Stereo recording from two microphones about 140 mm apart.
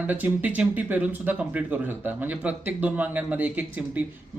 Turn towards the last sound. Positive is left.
turn(degrees=-10)  # may be behind; listen again after turning